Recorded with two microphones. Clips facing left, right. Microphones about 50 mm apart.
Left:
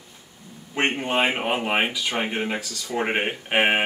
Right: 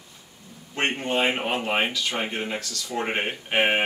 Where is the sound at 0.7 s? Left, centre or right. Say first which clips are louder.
Left 2 dB; centre.